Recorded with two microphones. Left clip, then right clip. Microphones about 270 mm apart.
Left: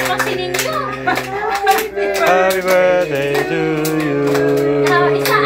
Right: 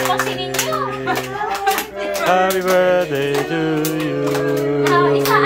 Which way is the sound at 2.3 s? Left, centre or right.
Right.